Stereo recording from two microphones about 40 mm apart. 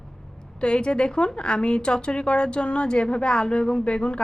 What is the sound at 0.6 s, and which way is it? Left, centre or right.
A woman's voice, left.